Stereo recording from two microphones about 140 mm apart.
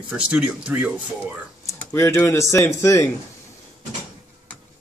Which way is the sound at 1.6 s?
20° left (ahead or behind).